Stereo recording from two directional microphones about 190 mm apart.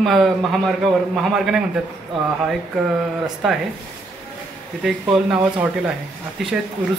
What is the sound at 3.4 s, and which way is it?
Speech, centre (ahead or behind).